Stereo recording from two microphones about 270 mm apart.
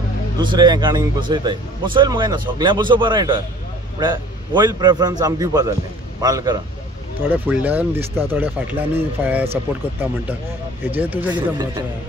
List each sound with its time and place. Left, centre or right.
0.4 s a man's voice: centre
11.0 s speech: centre